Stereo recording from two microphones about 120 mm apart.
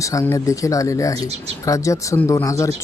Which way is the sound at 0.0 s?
25° left (ahead or behind).